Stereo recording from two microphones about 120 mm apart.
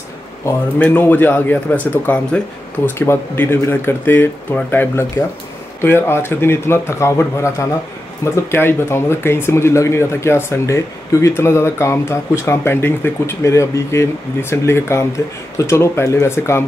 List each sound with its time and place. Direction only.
0.7 s speech: 15° left (ahead or behind)